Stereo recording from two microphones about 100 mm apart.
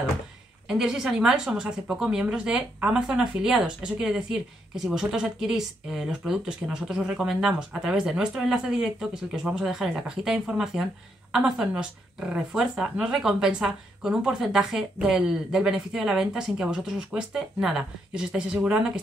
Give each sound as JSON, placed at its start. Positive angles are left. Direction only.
{"t": 0.7, "sound": "speech", "side_deg": -5}